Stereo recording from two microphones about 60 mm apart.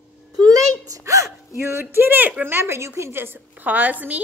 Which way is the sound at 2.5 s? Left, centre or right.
Right.